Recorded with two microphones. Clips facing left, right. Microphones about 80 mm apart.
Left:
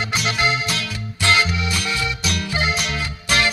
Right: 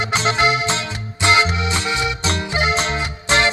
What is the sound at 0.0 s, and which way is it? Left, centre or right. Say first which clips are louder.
Music: right 4 dB; right.